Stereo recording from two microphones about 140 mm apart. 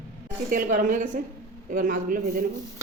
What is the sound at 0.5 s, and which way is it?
A woman's voice, 70° right (ahead or behind).